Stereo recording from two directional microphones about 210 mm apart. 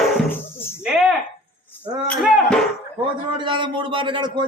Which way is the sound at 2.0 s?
Centre (ahead or behind).